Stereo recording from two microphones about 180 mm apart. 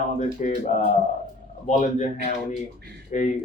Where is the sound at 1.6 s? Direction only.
45° left (ahead or behind).